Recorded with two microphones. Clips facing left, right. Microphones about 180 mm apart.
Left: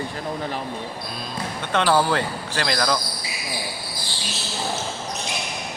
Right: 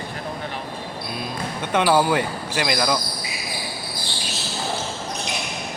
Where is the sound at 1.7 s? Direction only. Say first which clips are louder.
Right 1 dB; 10° right (ahead or behind).